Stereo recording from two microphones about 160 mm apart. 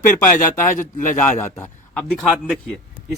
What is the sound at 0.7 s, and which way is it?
Speech, 55° left (ahead or behind).